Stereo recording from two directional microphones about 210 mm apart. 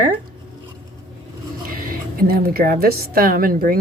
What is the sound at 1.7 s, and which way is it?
A woman's voice, 45° right (ahead or behind).